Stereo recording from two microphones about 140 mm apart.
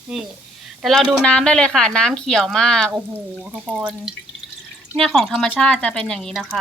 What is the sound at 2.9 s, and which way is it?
Speech, 15° right (ahead or behind).